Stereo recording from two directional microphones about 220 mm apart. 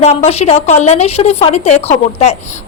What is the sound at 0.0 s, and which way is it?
A woman's voice, 30° left (ahead or behind).